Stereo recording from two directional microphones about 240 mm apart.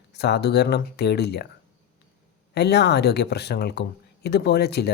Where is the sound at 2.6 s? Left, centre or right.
Left.